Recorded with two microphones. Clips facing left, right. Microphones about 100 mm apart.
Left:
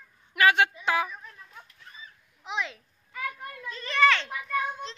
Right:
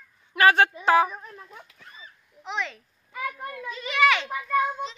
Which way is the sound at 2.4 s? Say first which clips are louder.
Right 1 dB; 5° left (ahead or behind).